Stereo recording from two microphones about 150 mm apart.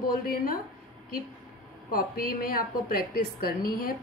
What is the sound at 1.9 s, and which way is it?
A woman's voice, 75° left (ahead or behind).